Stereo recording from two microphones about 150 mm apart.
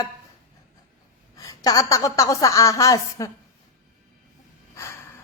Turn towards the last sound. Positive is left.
turn(degrees=20)  # may be behind; listen again after turning